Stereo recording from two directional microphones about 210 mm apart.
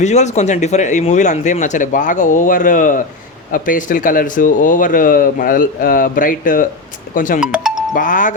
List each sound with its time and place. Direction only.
0.0 s speech: 35° left (ahead or behind)
7.3 s music: 5° right (ahead or behind)
7.9 s speech: 40° left (ahead or behind)